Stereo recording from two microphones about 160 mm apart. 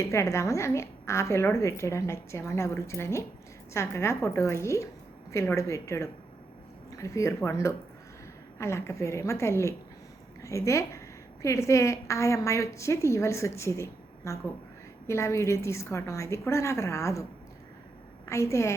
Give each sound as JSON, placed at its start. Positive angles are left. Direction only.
{"t": 0.0, "sound": "a woman's voice", "side_deg": 20}
{"t": 18.3, "sound": "a woman's voice", "side_deg": 20}